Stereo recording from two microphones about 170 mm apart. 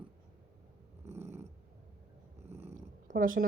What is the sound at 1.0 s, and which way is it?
Growling, 15° right (ahead or behind).